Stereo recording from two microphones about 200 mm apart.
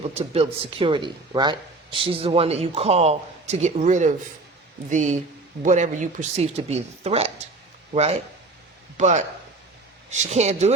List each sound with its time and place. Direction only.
0.1 s speech: 30° right (ahead or behind)